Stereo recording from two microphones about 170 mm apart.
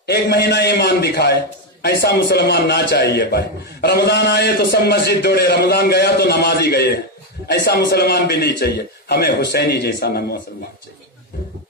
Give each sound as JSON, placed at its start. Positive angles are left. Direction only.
{"t": 0.0, "sound": "a man's voice", "side_deg": 70}